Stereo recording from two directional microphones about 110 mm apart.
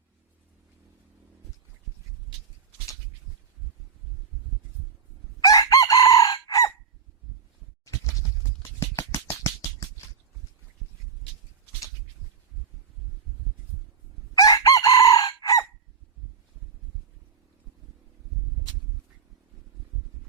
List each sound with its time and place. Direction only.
5.5 s chicken: 35° left (ahead or behind)
8.6 s a sound: 25° left (ahead or behind)
14.3 s chicken: 35° left (ahead or behind)